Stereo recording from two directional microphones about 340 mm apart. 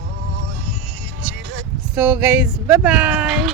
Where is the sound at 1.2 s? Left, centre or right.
Right.